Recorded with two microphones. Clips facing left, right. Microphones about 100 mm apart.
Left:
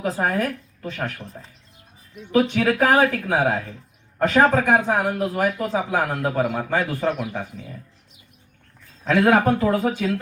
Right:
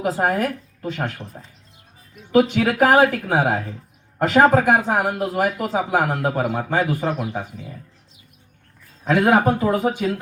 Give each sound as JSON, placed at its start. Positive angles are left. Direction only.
{"t": 0.0, "sound": "speech", "side_deg": -20}
{"t": 9.0, "sound": "speech", "side_deg": -15}